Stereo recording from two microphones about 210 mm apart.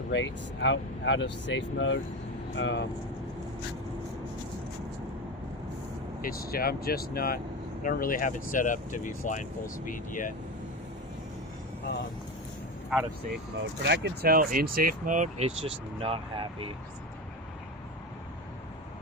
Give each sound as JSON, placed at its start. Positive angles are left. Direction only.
{"t": 0.1, "sound": "speech", "side_deg": 60}
{"t": 6.2, "sound": "speech", "side_deg": 45}
{"t": 13.8, "sound": "speech", "side_deg": -55}